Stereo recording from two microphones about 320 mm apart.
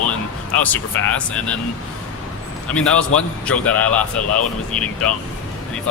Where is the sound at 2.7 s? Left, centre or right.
Centre.